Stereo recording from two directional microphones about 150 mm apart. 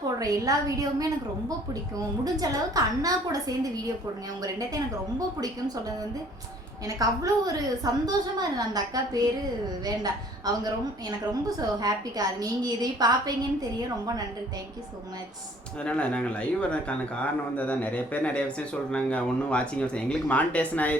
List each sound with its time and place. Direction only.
0.2 s a woman's voice: 25° right (ahead or behind)
2.2 s a woman's voice: 25° right (ahead or behind)
6.8 s a woman's voice: 25° right (ahead or behind)
15.8 s speech: 5° left (ahead or behind)